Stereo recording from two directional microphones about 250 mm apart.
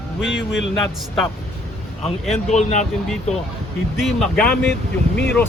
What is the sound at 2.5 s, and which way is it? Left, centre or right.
Speech, left.